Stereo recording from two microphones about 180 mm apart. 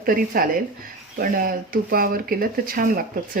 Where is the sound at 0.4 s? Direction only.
55° right (ahead or behind).